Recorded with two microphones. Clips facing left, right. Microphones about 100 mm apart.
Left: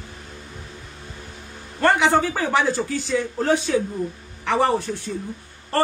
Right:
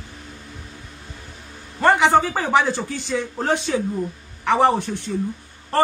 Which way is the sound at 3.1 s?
20° right (ahead or behind).